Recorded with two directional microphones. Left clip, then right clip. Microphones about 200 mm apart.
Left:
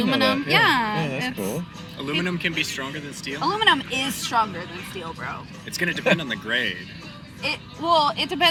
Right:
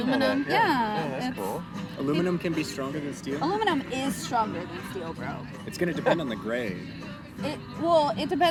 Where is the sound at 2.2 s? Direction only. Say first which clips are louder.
Left 4 dB; 40° left (ahead or behind).